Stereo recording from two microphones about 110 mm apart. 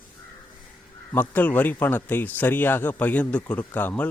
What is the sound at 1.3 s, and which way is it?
Speech, 15° left (ahead or behind).